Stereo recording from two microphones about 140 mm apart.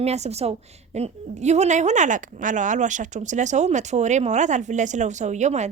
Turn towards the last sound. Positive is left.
turn(degrees=-55)  # may be behind; listen again after turning